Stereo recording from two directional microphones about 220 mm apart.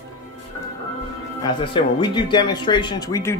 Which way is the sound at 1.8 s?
35° left (ahead or behind).